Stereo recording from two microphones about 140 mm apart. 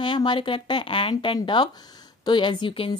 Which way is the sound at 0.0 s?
35° left (ahead or behind).